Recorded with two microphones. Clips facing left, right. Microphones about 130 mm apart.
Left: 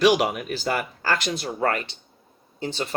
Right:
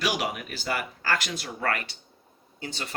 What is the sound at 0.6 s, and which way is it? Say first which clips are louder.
Speech: left 3 dB; 40° left (ahead or behind).